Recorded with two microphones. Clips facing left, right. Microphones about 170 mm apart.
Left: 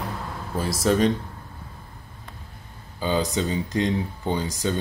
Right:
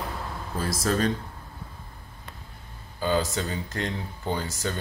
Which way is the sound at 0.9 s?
20° left (ahead or behind).